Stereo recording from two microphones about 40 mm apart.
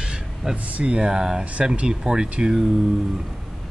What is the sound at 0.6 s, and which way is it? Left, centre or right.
Speech, right.